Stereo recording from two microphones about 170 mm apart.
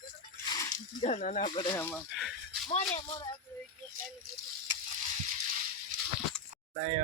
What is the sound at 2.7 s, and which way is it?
Speech, 40° left (ahead or behind).